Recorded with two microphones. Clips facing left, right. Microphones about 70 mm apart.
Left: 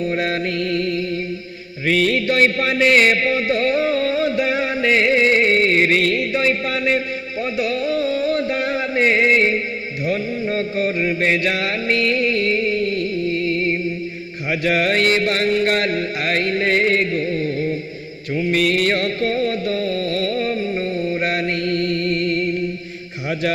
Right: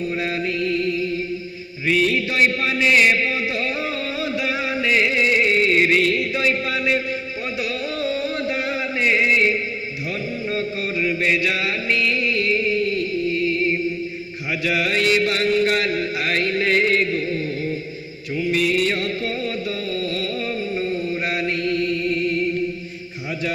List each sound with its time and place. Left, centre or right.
0.2 s mantra: left
1.9 s a sound: left
6.3 s music: left
10.5 s mantra: left
14.6 s a sound: left
18.5 s music: left